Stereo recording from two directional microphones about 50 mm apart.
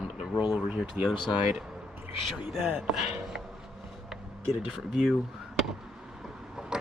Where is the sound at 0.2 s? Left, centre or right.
Centre.